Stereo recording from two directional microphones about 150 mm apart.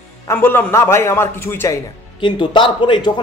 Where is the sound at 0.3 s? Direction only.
15° left (ahead or behind).